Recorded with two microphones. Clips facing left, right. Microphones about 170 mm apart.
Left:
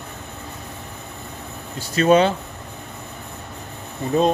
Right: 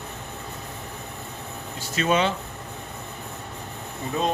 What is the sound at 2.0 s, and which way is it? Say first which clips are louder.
Speech: left 7 dB; 40° left (ahead or behind).